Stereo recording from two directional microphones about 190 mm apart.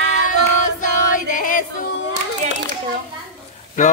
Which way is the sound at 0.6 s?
45° left (ahead or behind).